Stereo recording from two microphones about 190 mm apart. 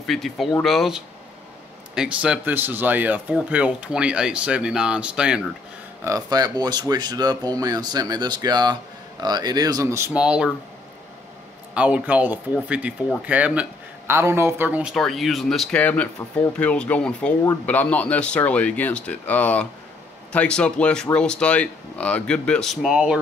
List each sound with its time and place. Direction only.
0.0 s speech: centre (ahead or behind)
6.0 s speech: 20° right (ahead or behind)
11.7 s speech: 5° right (ahead or behind)